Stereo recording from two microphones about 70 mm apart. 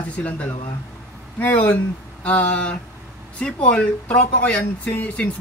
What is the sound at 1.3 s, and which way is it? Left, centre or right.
Speech, left.